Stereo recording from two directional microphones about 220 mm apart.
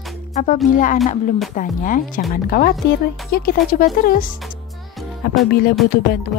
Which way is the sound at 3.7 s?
40° left (ahead or behind).